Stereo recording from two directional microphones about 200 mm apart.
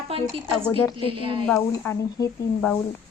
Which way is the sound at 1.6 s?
15° left (ahead or behind).